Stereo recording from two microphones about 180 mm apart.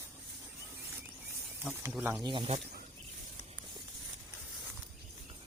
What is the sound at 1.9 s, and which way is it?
Speech, 10° right (ahead or behind).